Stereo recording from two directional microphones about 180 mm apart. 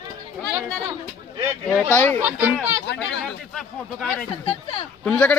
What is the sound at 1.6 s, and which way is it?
Speech, 5° left (ahead or behind).